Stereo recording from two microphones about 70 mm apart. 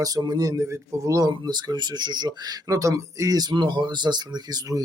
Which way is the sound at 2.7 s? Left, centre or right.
Right.